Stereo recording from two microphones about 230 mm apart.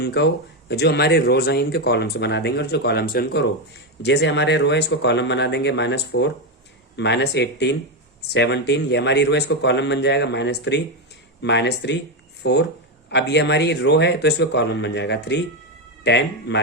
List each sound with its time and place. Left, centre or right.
0.0 s speech: left